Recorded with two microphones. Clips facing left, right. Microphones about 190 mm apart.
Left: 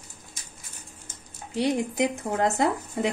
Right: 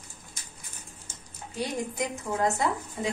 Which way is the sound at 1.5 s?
70° left (ahead or behind).